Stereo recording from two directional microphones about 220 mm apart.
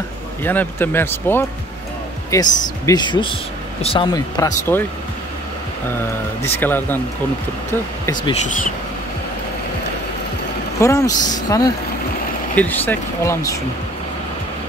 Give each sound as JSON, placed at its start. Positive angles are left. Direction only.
{"t": 0.4, "sound": "speech", "side_deg": 10}
{"t": 6.4, "sound": "speech", "side_deg": 10}
{"t": 10.8, "sound": "speech", "side_deg": 15}